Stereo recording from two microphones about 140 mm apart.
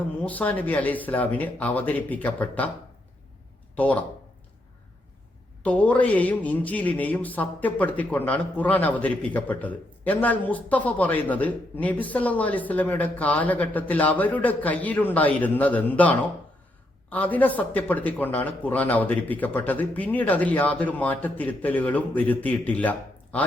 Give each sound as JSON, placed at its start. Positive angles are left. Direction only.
{"t": 0.2, "sound": "speech", "side_deg": 10}
{"t": 3.8, "sound": "speech", "side_deg": 10}
{"t": 5.6, "sound": "speech", "side_deg": 10}